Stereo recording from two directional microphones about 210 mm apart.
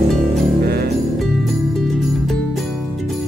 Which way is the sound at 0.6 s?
50° right (ahead or behind).